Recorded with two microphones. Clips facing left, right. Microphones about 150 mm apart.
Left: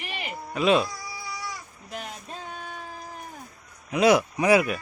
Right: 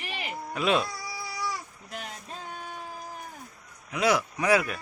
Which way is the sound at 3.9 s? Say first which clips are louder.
Left 6 dB; 20° left (ahead or behind).